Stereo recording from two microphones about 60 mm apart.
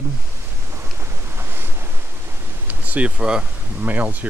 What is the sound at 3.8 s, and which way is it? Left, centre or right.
Speech, right.